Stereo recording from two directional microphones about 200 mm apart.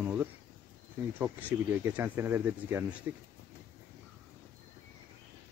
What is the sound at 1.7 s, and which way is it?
Speech, 10° right (ahead or behind).